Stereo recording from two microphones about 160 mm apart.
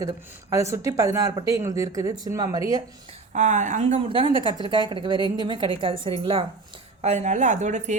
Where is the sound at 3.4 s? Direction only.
50° right (ahead or behind).